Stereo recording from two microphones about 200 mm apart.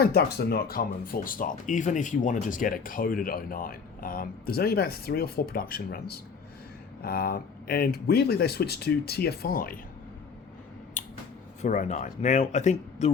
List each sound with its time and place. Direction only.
0.0 s speech: 50° left (ahead or behind)
11.0 s finger snapping: 40° left (ahead or behind)
11.6 s speech: 35° left (ahead or behind)